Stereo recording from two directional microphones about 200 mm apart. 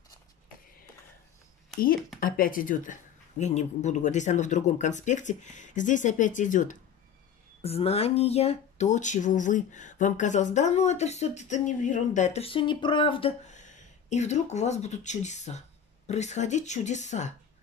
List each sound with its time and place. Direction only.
2.1 s speech: 45° left (ahead or behind)